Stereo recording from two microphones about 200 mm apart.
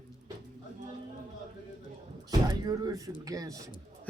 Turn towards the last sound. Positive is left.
turn(degrees=-15)  # may be behind; listen again after turning